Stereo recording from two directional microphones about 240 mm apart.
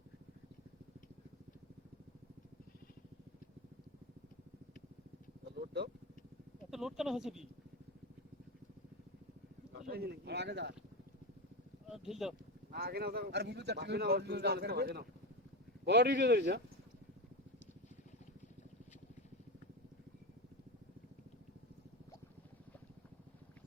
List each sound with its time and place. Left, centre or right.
6.7 s speech: centre
9.8 s speech: right
12.0 s speech: centre
12.7 s speech: right